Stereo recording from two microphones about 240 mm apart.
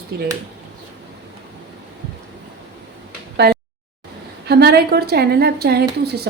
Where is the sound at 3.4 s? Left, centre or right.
Right.